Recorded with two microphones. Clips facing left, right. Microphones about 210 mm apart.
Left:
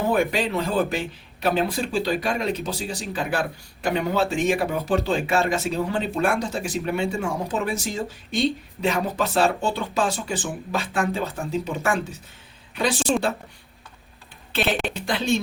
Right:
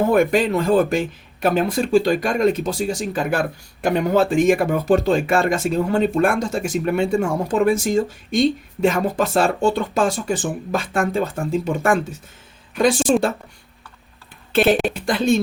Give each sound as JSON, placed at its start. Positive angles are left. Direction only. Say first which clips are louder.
{"t": 0.1, "sound": "speech", "louder": "right 6 dB", "side_deg": -50}
{"t": 14.5, "sound": "speech", "louder": "right 8 dB", "side_deg": -50}